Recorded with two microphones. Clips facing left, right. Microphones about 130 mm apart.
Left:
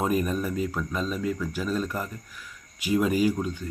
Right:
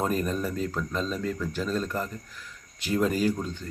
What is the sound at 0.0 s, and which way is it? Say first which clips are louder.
Speech: left 2 dB; 10° left (ahead or behind).